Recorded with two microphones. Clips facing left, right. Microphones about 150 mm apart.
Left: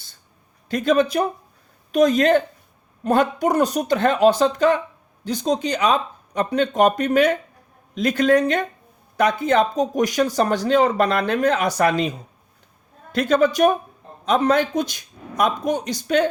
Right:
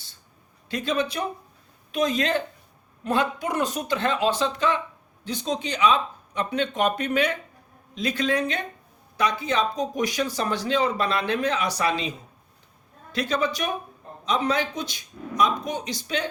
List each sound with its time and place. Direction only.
0.7 s speech: 45° left (ahead or behind)
13.1 s speech: 50° left (ahead or behind)